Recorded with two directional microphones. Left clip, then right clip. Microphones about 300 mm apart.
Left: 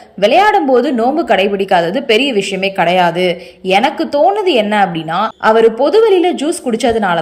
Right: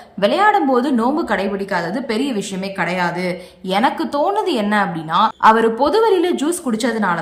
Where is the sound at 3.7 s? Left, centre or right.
Right.